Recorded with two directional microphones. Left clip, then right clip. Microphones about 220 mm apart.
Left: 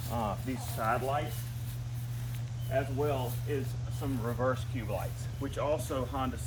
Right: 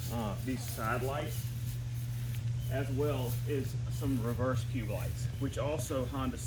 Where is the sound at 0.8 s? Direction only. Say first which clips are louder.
Left 5 dB; 40° left (ahead or behind).